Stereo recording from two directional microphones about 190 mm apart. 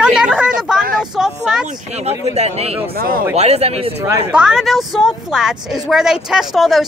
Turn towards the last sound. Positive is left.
turn(degrees=0)  # may be behind; listen again after turning